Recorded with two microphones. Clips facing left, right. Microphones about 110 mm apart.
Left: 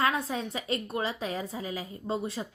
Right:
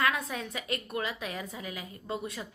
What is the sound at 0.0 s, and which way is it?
A woman's voice, 30° left (ahead or behind).